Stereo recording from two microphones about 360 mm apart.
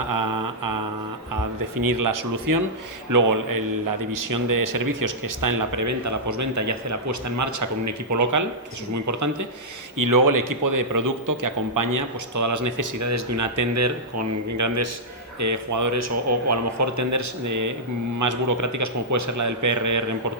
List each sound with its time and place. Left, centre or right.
0.1 s humming: right
1.7 s a man's voice: right
10.0 s a man's voice: right